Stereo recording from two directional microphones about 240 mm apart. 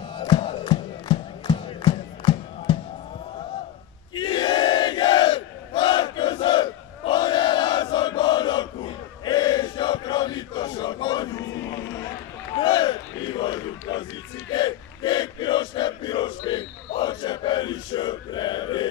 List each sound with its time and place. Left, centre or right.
0.2 s music: left
4.1 s battle cry: centre
12.5 s battle cry: centre